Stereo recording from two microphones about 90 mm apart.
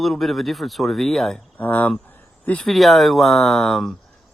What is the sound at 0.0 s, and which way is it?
Speech, centre (ahead or behind).